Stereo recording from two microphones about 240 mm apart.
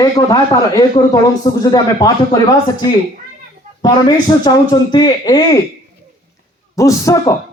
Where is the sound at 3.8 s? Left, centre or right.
Centre.